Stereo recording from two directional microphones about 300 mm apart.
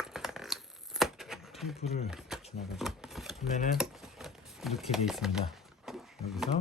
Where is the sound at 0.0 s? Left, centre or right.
Centre.